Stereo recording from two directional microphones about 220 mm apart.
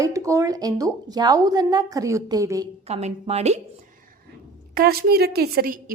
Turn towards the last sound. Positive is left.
turn(degrees=-40)  # may be behind; listen again after turning